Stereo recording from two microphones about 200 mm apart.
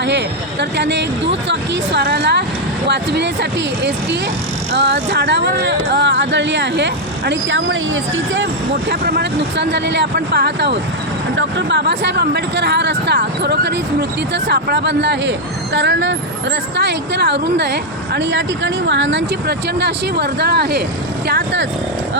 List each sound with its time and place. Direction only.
0.0 s a sound: 60° right (ahead or behind)
1.5 s speech: 60° right (ahead or behind)
4.7 s speech: 60° right (ahead or behind)
8.9 s speech: 55° right (ahead or behind)